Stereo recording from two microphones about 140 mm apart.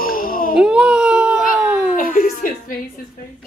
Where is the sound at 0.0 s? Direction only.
90° left.